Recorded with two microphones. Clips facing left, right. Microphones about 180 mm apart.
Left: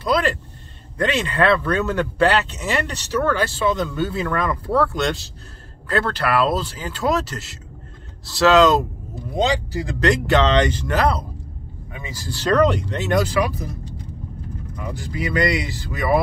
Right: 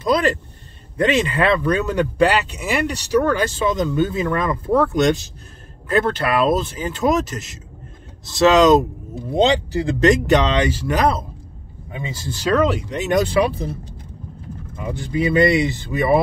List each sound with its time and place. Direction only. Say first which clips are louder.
0.0 s a sound: right 2 dB; 20° right (ahead or behind)
0.9 s speech: right 3 dB; 15° right (ahead or behind)
12.4 s speech: left 1 dB; 5° right (ahead or behind)
12.9 s speech: right 2 dB; 15° right (ahead or behind)
14.8 s speech: right 6 dB; 25° right (ahead or behind)